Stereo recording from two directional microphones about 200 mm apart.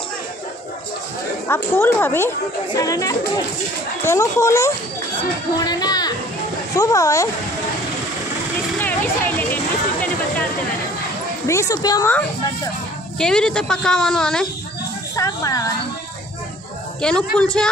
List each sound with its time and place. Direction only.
1.5 s speech: 10° left (ahead or behind)
8.8 s speech: 10° left (ahead or behind)
11.4 s speech: 15° left (ahead or behind)
13.2 s speech: 5° left (ahead or behind)
15.1 s a sound: 15° left (ahead or behind)
17.0 s speech: 5° left (ahead or behind)